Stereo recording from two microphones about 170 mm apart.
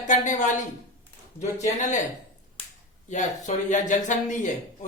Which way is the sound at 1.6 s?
45° left (ahead or behind).